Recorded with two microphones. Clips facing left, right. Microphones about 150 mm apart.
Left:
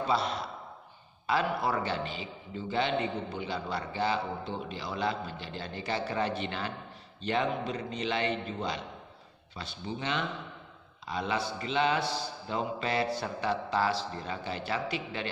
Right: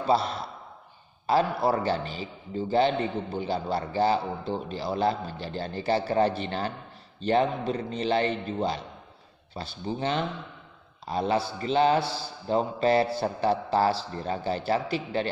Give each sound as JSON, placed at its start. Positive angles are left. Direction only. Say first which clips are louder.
{"t": 0.0, "sound": "a man's voice", "louder": "right 5 dB", "side_deg": -35}